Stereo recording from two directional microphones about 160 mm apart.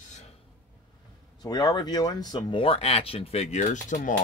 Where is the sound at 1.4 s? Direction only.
25° left (ahead or behind).